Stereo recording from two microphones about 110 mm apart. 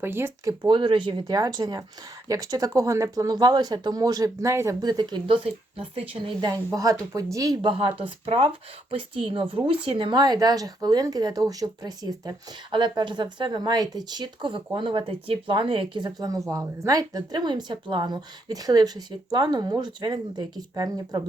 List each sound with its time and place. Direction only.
0.0 s speech: 20° right (ahead or behind)
0.6 s speech: 50° right (ahead or behind)
1.3 s speech: 35° right (ahead or behind)
4.8 s speech: 40° right (ahead or behind)
5.3 s speech: 60° right (ahead or behind)
6.4 s speech: 35° right (ahead or behind)
7.6 s speech: 50° right (ahead or behind)